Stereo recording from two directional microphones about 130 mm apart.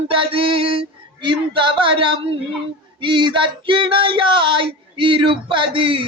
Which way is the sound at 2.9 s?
40° right (ahead or behind).